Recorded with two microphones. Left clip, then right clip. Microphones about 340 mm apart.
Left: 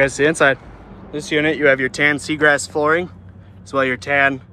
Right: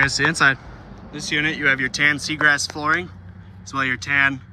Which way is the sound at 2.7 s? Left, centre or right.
Left.